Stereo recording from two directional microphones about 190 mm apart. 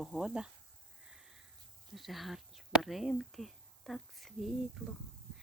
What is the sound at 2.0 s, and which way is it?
Speech, centre (ahead or behind).